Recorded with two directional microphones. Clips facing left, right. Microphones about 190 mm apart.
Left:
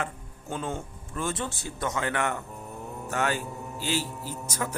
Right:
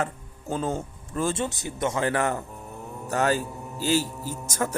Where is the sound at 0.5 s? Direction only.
35° right (ahead or behind); by 1.9 s 20° right (ahead or behind).